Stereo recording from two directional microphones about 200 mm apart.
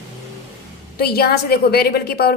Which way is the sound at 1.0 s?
50° left (ahead or behind).